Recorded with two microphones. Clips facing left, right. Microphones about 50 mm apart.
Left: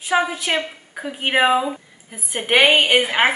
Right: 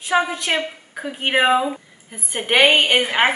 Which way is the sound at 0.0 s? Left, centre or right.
Centre.